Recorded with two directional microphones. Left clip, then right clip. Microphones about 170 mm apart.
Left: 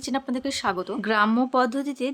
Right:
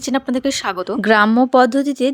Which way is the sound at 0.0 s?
40° right (ahead or behind).